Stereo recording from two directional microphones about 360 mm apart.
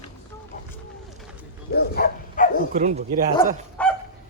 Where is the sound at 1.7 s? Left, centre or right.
Left.